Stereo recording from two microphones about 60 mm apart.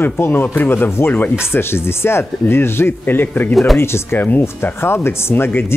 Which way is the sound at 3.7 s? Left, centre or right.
Left.